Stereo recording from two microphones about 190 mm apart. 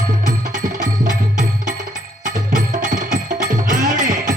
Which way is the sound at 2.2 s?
45° right (ahead or behind).